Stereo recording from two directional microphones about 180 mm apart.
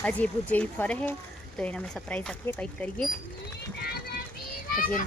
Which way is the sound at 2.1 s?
5° left (ahead or behind).